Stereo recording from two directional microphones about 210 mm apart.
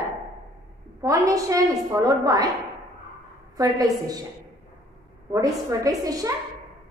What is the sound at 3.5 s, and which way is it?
Speech, 15° right (ahead or behind).